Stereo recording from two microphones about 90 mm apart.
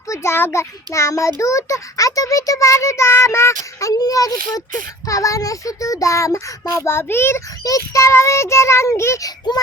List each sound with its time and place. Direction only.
0.1 s a child's voice: 30° left (ahead or behind)
7.6 s a child's voice: 40° left (ahead or behind)